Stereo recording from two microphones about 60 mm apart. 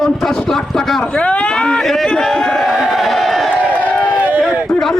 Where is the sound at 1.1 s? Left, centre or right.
Left.